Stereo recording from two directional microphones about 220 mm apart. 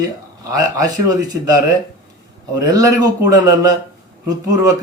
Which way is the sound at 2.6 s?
15° right (ahead or behind).